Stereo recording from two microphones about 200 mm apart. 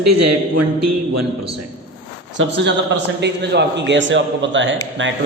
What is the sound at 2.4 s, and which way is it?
A man's voice, 65° right (ahead or behind).